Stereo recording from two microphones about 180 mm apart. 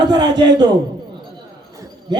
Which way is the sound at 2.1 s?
25° right (ahead or behind).